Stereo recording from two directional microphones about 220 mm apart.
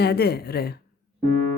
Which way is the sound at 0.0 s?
45° left (ahead or behind).